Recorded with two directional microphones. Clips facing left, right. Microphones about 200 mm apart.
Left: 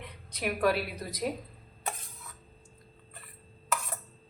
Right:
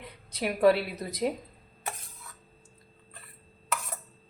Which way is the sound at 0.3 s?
30° right (ahead or behind).